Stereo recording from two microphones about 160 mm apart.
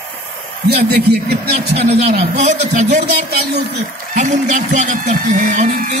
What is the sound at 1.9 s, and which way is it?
Speech, 45° right (ahead or behind).